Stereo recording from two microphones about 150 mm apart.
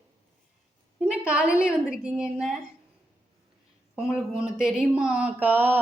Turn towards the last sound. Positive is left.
turn(degrees=-10)  # may be behind; listen again after turning